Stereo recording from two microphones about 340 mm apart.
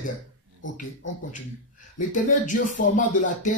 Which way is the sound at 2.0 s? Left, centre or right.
Left.